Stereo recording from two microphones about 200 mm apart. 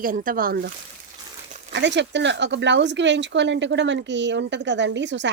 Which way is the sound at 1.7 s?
60° right (ahead or behind).